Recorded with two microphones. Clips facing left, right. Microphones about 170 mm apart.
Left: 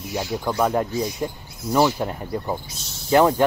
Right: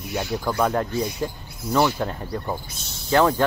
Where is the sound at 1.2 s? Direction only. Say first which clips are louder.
Left 1 dB; 20° left (ahead or behind).